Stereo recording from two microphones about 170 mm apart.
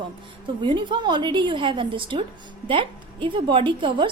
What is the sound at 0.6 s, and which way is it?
A woman's voice, 30° right (ahead or behind).